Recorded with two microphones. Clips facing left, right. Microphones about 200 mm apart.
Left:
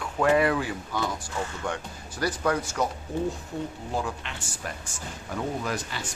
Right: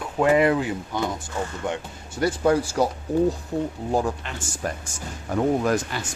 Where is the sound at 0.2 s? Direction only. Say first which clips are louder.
Right 4 dB; 20° right (ahead or behind).